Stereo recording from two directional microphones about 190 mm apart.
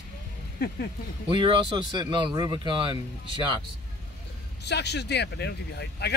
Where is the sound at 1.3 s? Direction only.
25° right (ahead or behind).